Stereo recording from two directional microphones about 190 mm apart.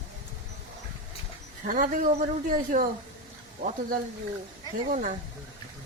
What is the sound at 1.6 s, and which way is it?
Speech, 45° right (ahead or behind).